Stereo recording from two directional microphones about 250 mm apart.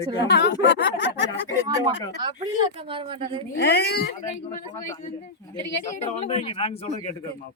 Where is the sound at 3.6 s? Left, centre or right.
Left.